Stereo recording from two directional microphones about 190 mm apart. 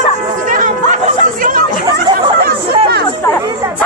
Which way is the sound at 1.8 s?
25° right (ahead or behind).